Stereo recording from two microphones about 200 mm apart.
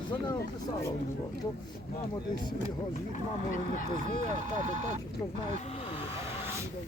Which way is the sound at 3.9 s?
40° right (ahead or behind).